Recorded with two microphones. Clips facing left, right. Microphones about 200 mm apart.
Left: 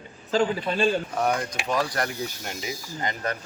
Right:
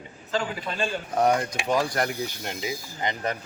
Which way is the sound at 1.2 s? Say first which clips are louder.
Right 3 dB; 25° right (ahead or behind).